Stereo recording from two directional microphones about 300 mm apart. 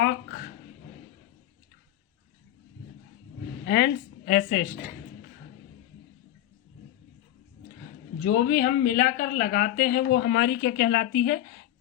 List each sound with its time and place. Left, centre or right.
3.7 s a woman's voice: left
8.2 s speech: left